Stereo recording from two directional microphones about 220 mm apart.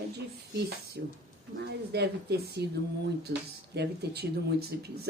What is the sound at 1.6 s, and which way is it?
A man's voice, 50° right (ahead or behind).